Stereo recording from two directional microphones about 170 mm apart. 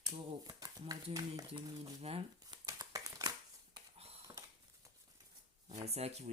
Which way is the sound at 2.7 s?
20° right (ahead or behind).